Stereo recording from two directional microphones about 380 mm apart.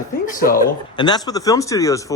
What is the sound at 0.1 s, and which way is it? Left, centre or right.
Speech, left.